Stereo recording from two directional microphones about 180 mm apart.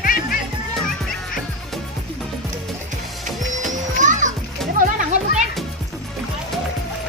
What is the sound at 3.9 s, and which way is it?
Music, 45° right (ahead or behind).